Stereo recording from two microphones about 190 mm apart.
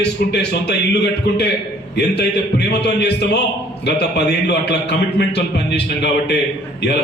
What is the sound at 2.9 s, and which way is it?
Speech, 60° left (ahead or behind).